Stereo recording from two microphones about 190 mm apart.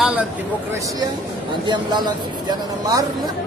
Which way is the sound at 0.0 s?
5° right (ahead or behind).